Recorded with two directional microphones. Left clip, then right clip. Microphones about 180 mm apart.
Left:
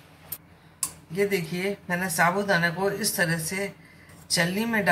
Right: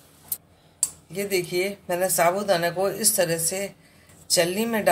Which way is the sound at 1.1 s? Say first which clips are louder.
Even; 60° right (ahead or behind).